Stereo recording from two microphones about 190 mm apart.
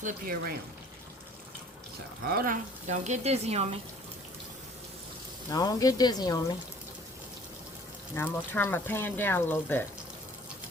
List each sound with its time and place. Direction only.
0.0 s speech: 50° right (ahead or behind)
2.2 s speech: 50° right (ahead or behind); by 3.8 s 35° right (ahead or behind)
5.5 s speech: 20° left (ahead or behind)
8.1 s speech: 15° left (ahead or behind)